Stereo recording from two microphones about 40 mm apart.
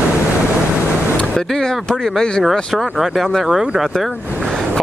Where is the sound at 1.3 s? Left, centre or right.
Centre.